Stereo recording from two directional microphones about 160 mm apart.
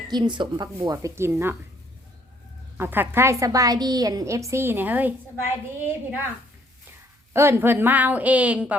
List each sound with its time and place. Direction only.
0.1 s a woman's voice: 30° right (ahead or behind)
2.7 s a woman's voice: 15° right (ahead or behind)
7.3 s a woman's voice: 15° right (ahead or behind)